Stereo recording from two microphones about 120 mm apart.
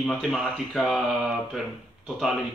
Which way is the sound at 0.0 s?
5° left (ahead or behind).